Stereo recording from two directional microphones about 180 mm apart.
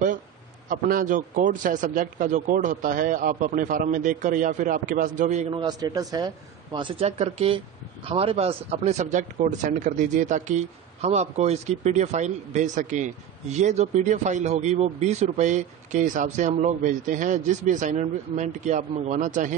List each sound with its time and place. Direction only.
0.7 s a man's voice: 50° right (ahead or behind)
5.5 s a man's voice: 25° right (ahead or behind); by 19.5 s 45° right (ahead or behind)